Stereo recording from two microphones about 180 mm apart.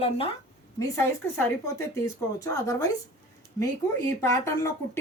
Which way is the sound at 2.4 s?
15° left (ahead or behind).